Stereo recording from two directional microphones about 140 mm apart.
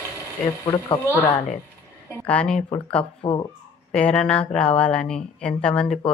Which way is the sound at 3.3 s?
35° left (ahead or behind).